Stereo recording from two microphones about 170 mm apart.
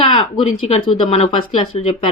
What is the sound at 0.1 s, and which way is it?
Speech, 30° left (ahead or behind).